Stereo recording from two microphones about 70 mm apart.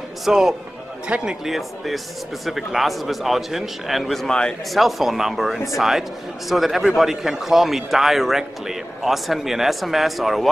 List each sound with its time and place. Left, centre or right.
0.2 s a man's voice: centre
1.4 s a man's voice: centre
4.6 s a man's voice: centre